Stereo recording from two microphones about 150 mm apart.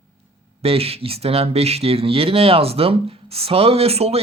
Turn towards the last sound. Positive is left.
turn(degrees=-40)  # may be behind; listen again after turning